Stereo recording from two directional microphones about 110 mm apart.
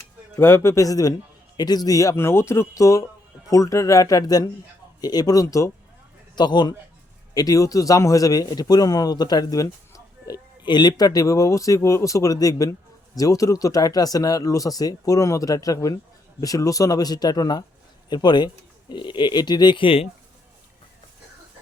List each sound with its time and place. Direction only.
0.3 s a man's voice: 20° left (ahead or behind)
6.3 s speech: 40° left (ahead or behind)